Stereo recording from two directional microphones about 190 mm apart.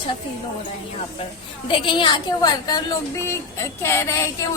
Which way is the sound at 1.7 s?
25° left (ahead or behind).